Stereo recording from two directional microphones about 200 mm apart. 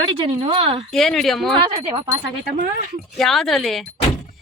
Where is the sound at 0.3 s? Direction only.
30° right (ahead or behind).